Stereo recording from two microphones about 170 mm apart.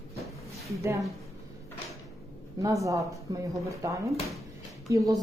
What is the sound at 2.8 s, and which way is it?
A woman's voice, 20° right (ahead or behind).